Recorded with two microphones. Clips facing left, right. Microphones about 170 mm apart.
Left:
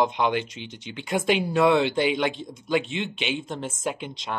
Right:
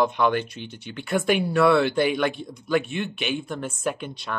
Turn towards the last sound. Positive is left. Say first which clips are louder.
# right 2 dB
turn(degrees=15)  # may be behind; listen again after turning